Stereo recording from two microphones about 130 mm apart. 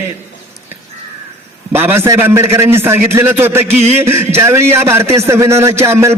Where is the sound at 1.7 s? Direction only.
15° right (ahead or behind).